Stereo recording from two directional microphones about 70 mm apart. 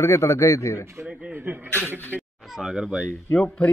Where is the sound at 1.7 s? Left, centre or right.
Right.